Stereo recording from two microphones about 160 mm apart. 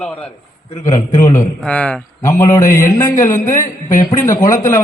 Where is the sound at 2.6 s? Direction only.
55° left (ahead or behind).